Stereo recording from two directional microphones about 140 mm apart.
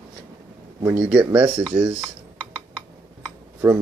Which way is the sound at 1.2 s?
25° right (ahead or behind).